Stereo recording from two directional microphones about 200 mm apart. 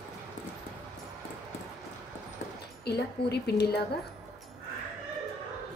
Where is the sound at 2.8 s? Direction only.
55° left (ahead or behind).